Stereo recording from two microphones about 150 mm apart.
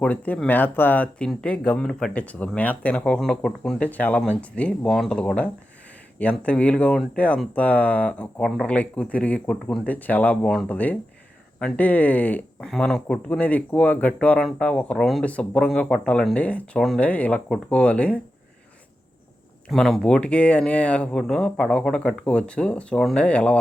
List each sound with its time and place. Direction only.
0.0 s speech: 10° left (ahead or behind)
19.7 s speech: 5° left (ahead or behind)